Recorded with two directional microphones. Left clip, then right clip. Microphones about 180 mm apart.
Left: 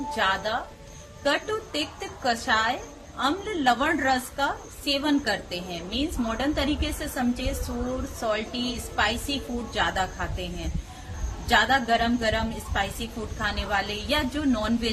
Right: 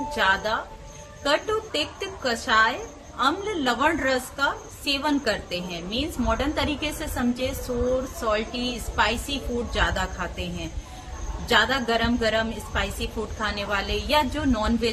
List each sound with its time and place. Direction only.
0.2 s a woman's voice: 15° right (ahead or behind)